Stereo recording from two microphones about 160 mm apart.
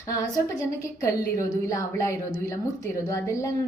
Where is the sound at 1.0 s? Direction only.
20° left (ahead or behind).